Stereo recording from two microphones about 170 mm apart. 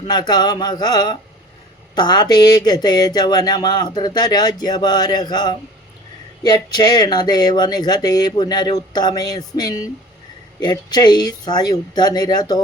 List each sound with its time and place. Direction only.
0.1 s speech: 25° left (ahead or behind)